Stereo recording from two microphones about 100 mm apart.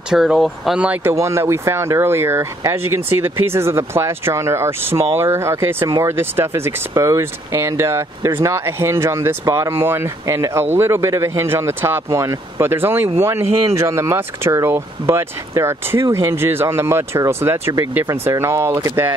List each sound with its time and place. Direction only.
0.1 s speech: 5° right (ahead or behind)
1.1 s speech: 30° right (ahead or behind)